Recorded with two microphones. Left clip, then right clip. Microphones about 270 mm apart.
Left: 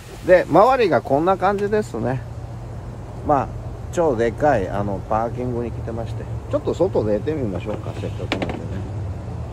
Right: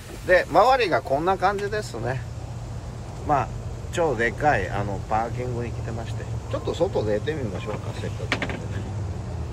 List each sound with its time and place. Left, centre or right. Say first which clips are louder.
0.3 s speech: left 4 dB; left
3.3 s speech: left 4 dB; left